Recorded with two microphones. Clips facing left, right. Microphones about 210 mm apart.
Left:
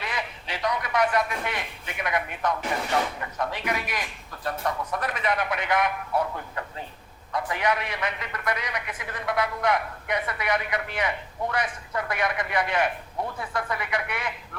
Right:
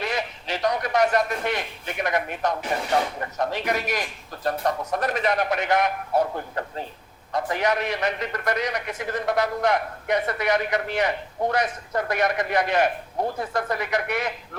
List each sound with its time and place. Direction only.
0.0 s a man's voice: 40° right (ahead or behind)